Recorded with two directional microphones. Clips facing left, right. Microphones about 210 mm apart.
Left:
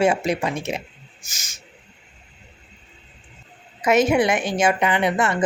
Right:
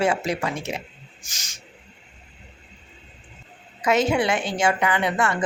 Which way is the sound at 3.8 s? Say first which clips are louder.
Left 3 dB; 20° left (ahead or behind).